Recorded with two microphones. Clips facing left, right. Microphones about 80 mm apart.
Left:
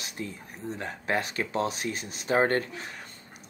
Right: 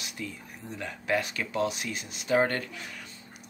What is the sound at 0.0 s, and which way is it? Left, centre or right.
Speech, left.